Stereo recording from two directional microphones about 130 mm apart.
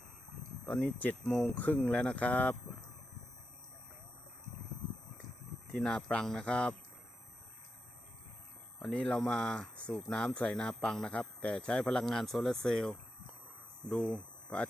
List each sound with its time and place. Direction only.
0.6 s speech: 10° left (ahead or behind)
5.7 s speech: 5° left (ahead or behind)
8.8 s speech: 5° left (ahead or behind)